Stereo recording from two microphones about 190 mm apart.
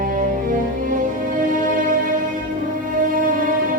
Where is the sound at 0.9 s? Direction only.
45° right (ahead or behind).